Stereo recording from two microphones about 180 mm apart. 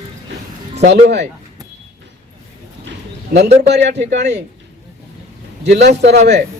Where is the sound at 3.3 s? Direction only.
55° right (ahead or behind).